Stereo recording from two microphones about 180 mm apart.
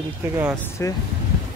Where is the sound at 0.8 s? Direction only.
15° left (ahead or behind).